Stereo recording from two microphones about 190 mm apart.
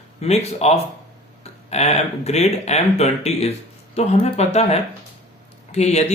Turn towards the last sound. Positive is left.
turn(degrees=35)  # may be behind; listen again after turning